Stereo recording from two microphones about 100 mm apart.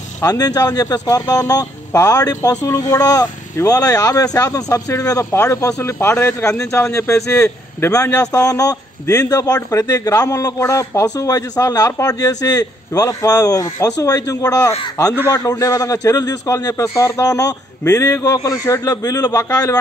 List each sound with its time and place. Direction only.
0.2 s a man's voice: 40° left (ahead or behind)
7.9 s a man's voice: 35° left (ahead or behind)